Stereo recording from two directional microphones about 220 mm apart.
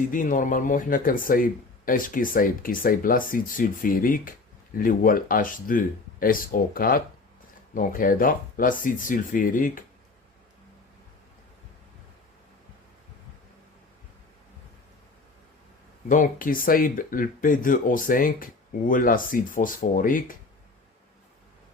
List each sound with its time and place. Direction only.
0.1 s speech: 35° left (ahead or behind)
16.0 s speech: 35° left (ahead or behind)